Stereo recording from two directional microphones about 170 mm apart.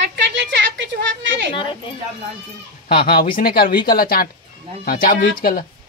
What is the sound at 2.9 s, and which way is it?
Speech, 65° left (ahead or behind).